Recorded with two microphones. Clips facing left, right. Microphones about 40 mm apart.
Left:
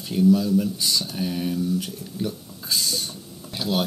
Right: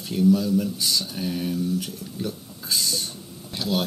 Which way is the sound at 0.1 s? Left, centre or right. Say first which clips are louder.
Left 1 dB; centre.